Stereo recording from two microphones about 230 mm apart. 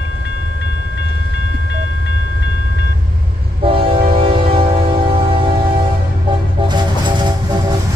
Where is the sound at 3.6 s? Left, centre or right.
Right.